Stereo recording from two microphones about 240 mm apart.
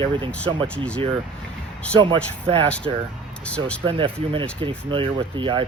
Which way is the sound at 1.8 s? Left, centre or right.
Centre.